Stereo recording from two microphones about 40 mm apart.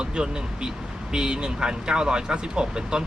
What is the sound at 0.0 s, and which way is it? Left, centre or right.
Speech, centre.